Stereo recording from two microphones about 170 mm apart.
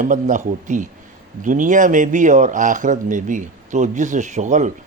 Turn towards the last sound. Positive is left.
turn(degrees=-45)  # may be behind; listen again after turning